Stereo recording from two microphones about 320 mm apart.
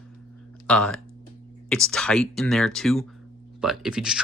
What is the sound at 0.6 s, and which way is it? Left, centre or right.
Speech, centre.